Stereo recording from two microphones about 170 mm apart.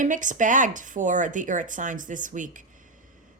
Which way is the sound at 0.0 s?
50° right (ahead or behind).